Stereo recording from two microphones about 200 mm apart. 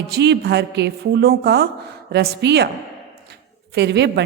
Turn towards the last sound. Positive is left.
turn(degrees=-55)  # may be behind; listen again after turning